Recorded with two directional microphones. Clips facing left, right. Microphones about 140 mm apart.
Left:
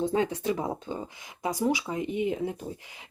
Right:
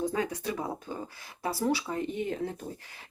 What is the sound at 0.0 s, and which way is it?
Speech, 25° left (ahead or behind).